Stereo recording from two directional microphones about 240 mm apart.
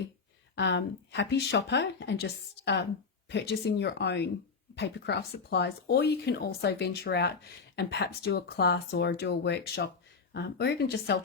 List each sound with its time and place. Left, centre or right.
0.5 s speech: left